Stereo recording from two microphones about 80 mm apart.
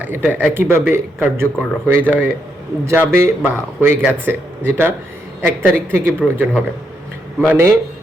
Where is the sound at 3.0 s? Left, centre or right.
Right.